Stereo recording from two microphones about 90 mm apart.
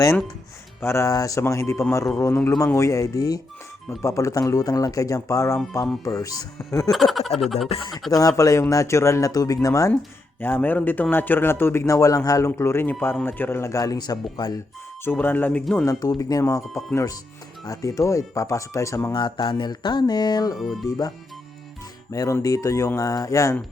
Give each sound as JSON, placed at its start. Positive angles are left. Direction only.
{"t": 0.8, "sound": "a man's voice", "side_deg": 30}
{"t": 6.9, "sound": "a sound", "side_deg": 0}
{"t": 8.1, "sound": "speech", "side_deg": 40}
{"t": 10.4, "sound": "a man's voice", "side_deg": 20}
{"t": 12.5, "sound": "a man's voice", "side_deg": 25}
{"t": 15.0, "sound": "a man's voice", "side_deg": 20}
{"t": 15.8, "sound": "speech", "side_deg": 40}
{"t": 19.1, "sound": "speech", "side_deg": 70}
{"t": 22.1, "sound": "speech", "side_deg": 40}